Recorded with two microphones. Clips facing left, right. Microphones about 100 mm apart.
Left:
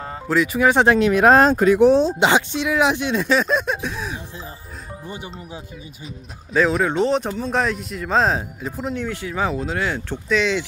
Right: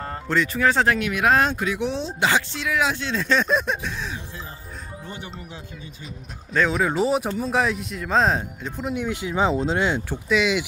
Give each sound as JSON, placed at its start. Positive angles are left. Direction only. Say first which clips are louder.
{"t": 0.0, "sound": "speech", "louder": "left 3 dB", "side_deg": 5}
{"t": 0.9, "sound": "speech", "louder": "left 7 dB", "side_deg": 35}
{"t": 2.1, "sound": "speech", "louder": "left 5 dB", "side_deg": 20}
{"t": 3.3, "sound": "speech", "louder": "left 2 dB", "side_deg": 0}
{"t": 5.0, "sound": "speech", "louder": "left 4 dB", "side_deg": 15}
{"t": 6.5, "sound": "speech", "louder": "left 3 dB", "side_deg": 0}
{"t": 8.9, "sound": "speech", "louder": "right 1 dB", "side_deg": -15}